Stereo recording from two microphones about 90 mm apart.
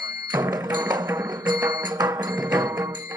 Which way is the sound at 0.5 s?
50° right (ahead or behind).